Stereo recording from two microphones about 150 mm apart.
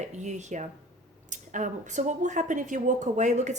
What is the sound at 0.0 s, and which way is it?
Speech, 50° right (ahead or behind).